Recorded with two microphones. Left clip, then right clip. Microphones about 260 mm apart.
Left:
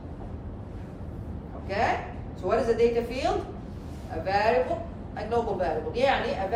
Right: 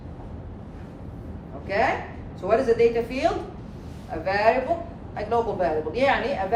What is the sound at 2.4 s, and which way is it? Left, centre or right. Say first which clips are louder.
A woman's voice: right 4 dB; right.